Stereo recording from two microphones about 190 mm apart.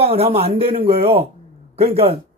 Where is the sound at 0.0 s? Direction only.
30° right (ahead or behind).